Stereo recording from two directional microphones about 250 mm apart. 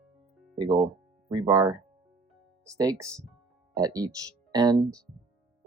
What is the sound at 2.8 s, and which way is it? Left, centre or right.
Speech, centre.